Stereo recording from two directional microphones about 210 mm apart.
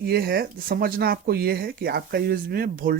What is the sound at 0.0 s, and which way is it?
Speech, 45° right (ahead or behind).